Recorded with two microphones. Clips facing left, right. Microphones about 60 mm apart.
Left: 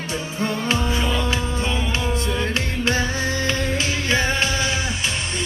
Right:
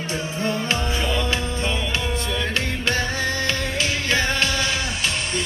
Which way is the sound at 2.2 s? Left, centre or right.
Left.